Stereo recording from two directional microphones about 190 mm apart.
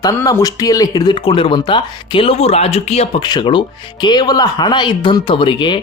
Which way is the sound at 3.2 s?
25° left (ahead or behind).